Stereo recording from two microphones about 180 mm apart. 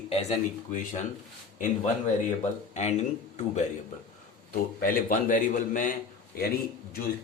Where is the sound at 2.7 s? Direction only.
40° left (ahead or behind).